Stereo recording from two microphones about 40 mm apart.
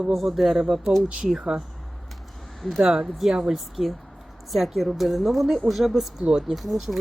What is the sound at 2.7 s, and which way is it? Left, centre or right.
Speech, centre.